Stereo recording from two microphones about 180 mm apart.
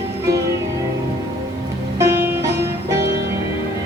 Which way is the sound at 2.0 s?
15° right (ahead or behind).